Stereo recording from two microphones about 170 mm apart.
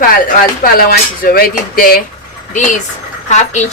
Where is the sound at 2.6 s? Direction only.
50° left (ahead or behind).